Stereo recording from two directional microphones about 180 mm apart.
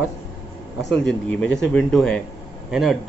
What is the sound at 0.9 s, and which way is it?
Speech, 5° left (ahead or behind).